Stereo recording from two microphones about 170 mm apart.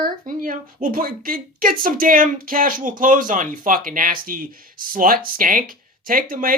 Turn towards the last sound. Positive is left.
turn(degrees=-55)  # may be behind; listen again after turning